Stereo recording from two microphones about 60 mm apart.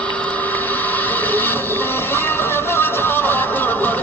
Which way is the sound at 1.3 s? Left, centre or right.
Left.